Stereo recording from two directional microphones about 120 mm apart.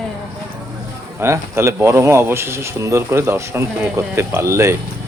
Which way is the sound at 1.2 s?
20° right (ahead or behind).